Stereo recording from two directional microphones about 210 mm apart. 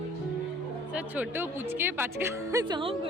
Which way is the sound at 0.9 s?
10° right (ahead or behind).